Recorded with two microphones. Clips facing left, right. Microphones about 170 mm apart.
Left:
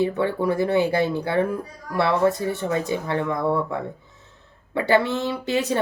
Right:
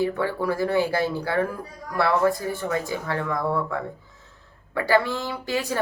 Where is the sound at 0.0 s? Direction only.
20° left (ahead or behind).